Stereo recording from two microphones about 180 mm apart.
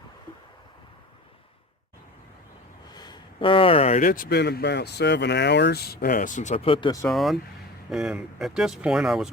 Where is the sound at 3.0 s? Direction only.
25° left (ahead or behind).